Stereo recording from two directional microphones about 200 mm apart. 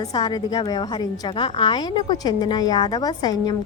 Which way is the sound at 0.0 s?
20° left (ahead or behind).